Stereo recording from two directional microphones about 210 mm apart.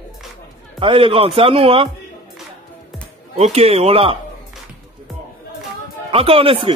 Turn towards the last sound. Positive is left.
turn(degrees=-25)  # may be behind; listen again after turning